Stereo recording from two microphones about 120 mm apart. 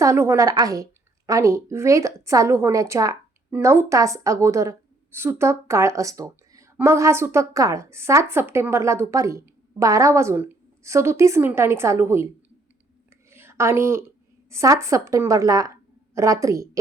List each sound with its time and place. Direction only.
0.0 s a woman's voice: 25° right (ahead or behind)
13.3 s a sound: 20° right (ahead or behind)
14.5 s a woman's voice: 25° right (ahead or behind)